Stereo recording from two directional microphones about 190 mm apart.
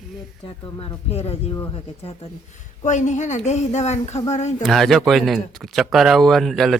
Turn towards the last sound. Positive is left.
turn(degrees=0)  # may be behind; listen again after turning